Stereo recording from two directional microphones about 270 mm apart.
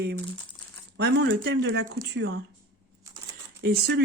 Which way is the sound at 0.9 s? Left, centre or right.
Right.